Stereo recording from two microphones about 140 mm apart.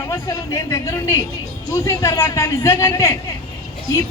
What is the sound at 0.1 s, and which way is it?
A woman's voice, 25° left (ahead or behind).